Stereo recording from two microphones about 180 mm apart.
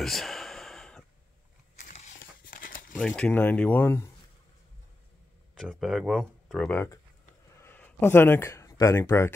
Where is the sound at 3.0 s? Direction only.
5° left (ahead or behind).